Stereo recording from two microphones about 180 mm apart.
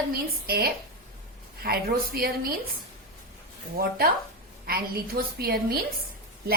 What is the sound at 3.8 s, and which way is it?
A woman's voice, 60° right (ahead or behind).